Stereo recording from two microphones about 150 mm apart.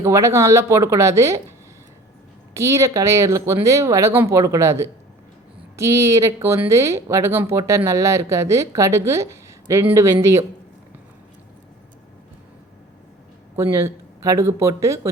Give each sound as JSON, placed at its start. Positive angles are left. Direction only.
{"t": 0.0, "sound": "speech", "side_deg": -20}
{"t": 2.6, "sound": "speech", "side_deg": -20}
{"t": 13.6, "sound": "speech", "side_deg": -20}